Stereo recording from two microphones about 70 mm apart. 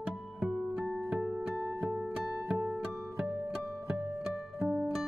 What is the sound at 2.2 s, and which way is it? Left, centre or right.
Music, centre.